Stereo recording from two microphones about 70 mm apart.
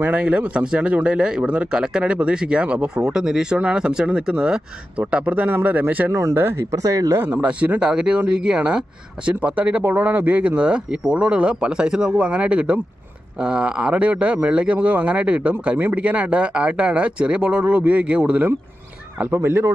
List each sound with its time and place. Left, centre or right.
0.0 s a man's voice: centre
6.3 s speech: right
7.2 s speech: right
7.4 s a man's voice: centre
19.3 s speech: right